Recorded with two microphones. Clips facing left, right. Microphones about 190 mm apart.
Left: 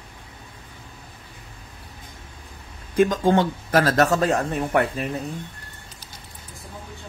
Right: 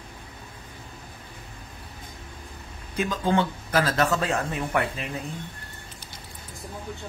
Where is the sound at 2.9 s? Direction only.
45° left (ahead or behind).